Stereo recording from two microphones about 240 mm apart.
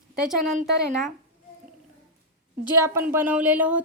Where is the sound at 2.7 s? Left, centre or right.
Centre.